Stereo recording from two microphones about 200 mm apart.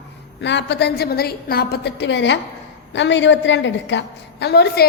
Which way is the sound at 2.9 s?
65° left (ahead or behind).